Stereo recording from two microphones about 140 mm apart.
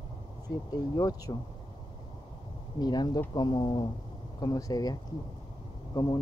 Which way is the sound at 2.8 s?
30° left (ahead or behind).